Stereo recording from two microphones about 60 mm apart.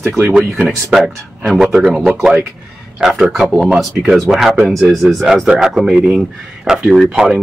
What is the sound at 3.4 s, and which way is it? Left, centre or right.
Speech, centre.